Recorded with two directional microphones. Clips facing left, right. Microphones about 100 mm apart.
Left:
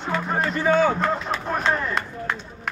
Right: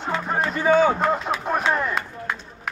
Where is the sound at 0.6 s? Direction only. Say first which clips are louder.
Right 2 dB; 10° right (ahead or behind).